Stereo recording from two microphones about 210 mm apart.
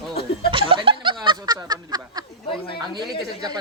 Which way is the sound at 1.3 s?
20° right (ahead or behind).